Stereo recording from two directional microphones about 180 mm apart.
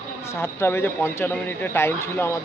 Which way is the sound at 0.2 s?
15° left (ahead or behind).